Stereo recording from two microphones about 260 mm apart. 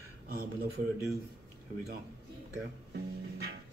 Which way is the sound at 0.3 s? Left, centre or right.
Right.